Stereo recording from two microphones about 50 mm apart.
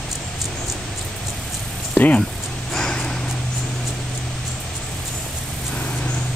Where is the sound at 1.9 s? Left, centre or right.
Left.